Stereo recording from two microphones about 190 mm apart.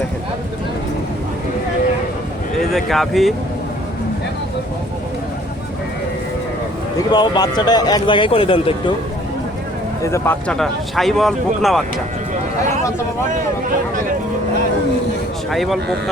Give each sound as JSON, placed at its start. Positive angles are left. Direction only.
{"t": 2.6, "sound": "speech", "side_deg": 0}
{"t": 7.1, "sound": "a man's voice", "side_deg": 20}
{"t": 10.0, "sound": "speech", "side_deg": 15}
{"t": 15.4, "sound": "speech", "side_deg": 0}